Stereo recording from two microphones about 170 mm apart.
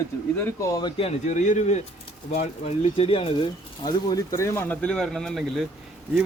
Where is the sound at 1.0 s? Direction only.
40° left (ahead or behind).